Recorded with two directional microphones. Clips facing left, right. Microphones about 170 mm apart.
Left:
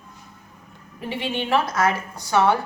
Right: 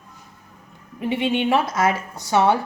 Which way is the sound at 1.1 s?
20° right (ahead or behind).